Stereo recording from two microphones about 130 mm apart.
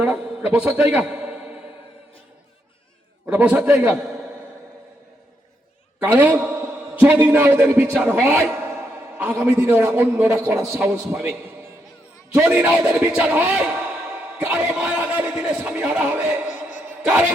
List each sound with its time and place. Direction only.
0.0 s a man's voice: 5° right (ahead or behind)
3.2 s a man's voice: 10° right (ahead or behind)
6.0 s a man's voice: 15° right (ahead or behind)
11.1 s a man's voice: 5° right (ahead or behind)
14.3 s a sound: 15° right (ahead or behind)
17.0 s speech: 10° right (ahead or behind)